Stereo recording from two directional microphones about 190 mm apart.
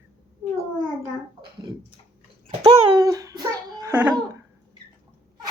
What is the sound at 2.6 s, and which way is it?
Child singing, 20° right (ahead or behind).